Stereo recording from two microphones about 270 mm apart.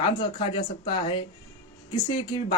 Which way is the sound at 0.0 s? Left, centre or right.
Centre.